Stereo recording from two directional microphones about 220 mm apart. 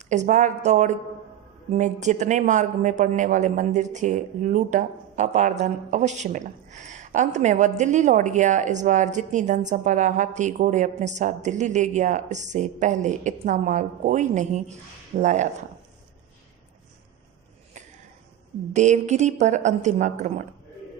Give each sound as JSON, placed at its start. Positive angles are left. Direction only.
{"t": 0.1, "sound": "speech", "side_deg": -35}
{"t": 17.7, "sound": "a sound", "side_deg": -30}
{"t": 18.7, "sound": "speech", "side_deg": -30}